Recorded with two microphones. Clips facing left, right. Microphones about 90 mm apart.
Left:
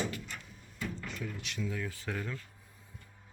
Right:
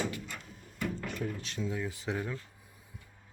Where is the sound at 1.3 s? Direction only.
35° right (ahead or behind).